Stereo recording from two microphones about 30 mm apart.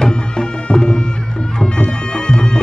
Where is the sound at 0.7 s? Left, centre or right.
Left.